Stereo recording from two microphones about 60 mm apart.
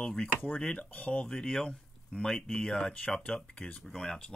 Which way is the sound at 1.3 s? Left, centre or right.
Centre.